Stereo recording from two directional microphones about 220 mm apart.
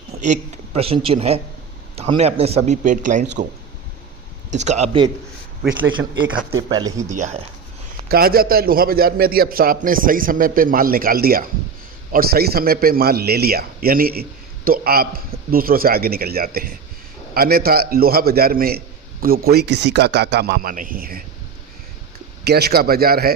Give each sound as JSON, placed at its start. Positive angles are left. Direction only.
{"t": 0.1, "sound": "a man's voice", "side_deg": -30}
{"t": 4.5, "sound": "a man's voice", "side_deg": -30}
{"t": 6.5, "sound": "speech", "side_deg": -15}
{"t": 7.1, "sound": "a man's voice", "side_deg": -30}
{"t": 8.1, "sound": "a man's voice", "side_deg": -40}
{"t": 22.4, "sound": "a man's voice", "side_deg": -45}